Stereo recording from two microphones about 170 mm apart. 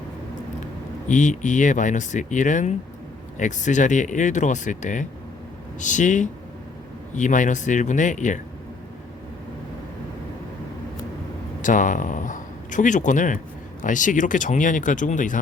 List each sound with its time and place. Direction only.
1.0 s speech: 45° left (ahead or behind)
11.6 s speech: 50° left (ahead or behind)